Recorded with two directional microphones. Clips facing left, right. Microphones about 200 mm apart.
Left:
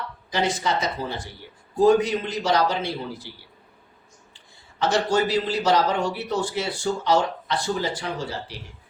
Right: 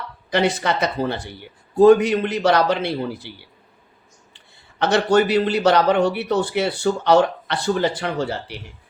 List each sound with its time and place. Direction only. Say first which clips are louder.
0.3 s a man's voice: right 5 dB; 65° right (ahead or behind)
4.4 s a man's voice: right 3 dB; 65° right (ahead or behind)